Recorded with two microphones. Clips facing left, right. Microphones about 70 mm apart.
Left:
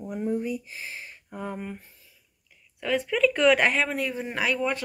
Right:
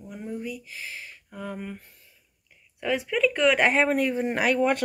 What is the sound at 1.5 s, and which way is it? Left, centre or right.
Speech, centre.